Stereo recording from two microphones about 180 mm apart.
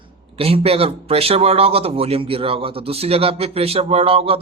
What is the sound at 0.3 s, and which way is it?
Speech, 35° right (ahead or behind).